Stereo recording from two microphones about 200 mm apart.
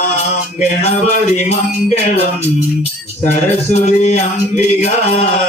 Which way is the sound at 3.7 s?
35° left (ahead or behind).